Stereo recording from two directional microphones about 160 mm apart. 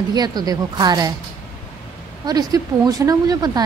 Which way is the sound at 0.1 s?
25° right (ahead or behind).